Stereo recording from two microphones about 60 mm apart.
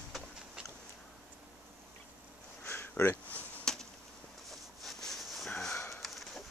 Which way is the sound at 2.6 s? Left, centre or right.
Left.